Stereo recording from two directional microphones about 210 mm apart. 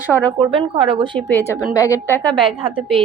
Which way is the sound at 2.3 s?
25° right (ahead or behind).